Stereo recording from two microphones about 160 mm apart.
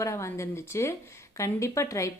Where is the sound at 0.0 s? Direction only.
15° left (ahead or behind).